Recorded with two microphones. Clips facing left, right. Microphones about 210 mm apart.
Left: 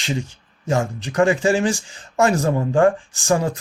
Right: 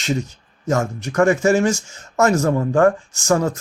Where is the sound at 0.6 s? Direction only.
15° left (ahead or behind).